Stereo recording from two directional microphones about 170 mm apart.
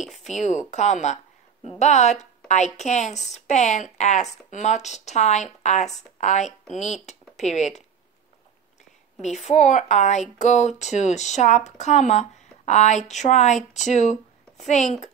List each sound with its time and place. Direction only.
0.0 s speech: centre (ahead or behind)
0.3 s a woman's voice: 45° left (ahead or behind)
9.2 s a woman's voice: 45° left (ahead or behind)